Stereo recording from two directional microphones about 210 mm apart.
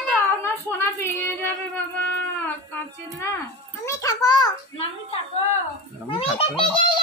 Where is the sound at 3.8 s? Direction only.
15° left (ahead or behind).